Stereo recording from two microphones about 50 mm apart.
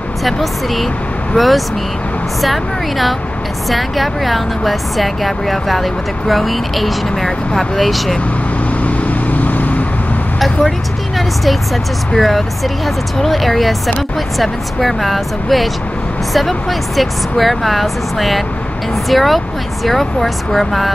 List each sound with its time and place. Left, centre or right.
0.2 s speech: centre
8.8 s vehicle: left
11.1 s speech: centre